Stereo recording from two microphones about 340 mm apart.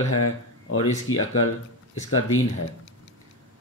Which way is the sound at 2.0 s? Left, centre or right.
Left.